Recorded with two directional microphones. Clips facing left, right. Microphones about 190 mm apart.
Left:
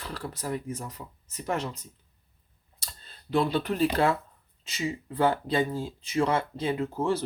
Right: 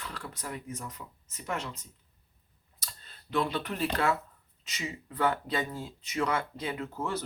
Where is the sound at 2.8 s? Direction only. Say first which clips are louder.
Left 2 dB; 30° left (ahead or behind).